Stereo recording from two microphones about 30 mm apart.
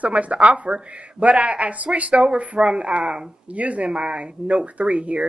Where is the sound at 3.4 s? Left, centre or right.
Right.